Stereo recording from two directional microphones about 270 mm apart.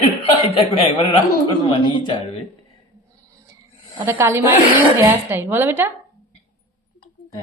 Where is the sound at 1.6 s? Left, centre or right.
Centre.